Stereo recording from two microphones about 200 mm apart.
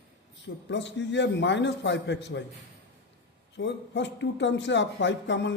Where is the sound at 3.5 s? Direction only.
60° left (ahead or behind).